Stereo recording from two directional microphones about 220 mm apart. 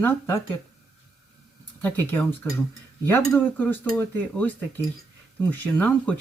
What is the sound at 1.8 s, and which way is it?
Speech, 10° left (ahead or behind).